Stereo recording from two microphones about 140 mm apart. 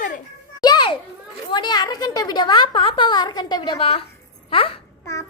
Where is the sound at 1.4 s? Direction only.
30° left (ahead or behind).